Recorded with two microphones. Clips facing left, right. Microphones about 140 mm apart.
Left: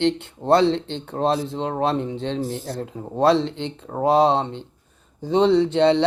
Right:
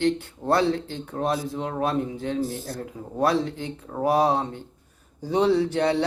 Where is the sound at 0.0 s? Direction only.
25° left (ahead or behind).